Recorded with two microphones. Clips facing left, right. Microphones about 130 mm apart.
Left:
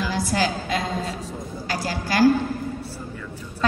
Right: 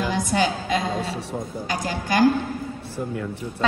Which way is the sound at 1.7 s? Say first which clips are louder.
Right 1 dB; 20° right (ahead or behind).